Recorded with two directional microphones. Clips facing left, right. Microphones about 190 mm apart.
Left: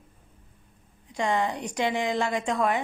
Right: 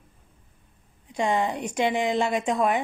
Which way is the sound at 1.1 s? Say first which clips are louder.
Right 2 dB; 20° right (ahead or behind).